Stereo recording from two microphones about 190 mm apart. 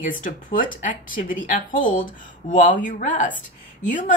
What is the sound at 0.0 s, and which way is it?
Speech, 45° left (ahead or behind).